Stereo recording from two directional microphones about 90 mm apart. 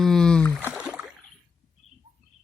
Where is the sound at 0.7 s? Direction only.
10° right (ahead or behind).